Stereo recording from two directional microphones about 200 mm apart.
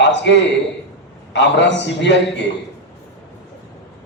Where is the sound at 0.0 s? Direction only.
60° left (ahead or behind).